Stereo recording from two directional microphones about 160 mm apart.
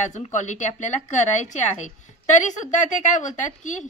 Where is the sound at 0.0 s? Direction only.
50° left (ahead or behind).